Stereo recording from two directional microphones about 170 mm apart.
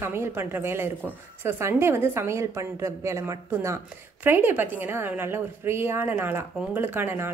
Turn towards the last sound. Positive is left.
turn(degrees=-15)  # may be behind; listen again after turning